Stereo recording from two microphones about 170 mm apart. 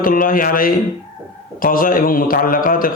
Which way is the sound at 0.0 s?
55° left (ahead or behind).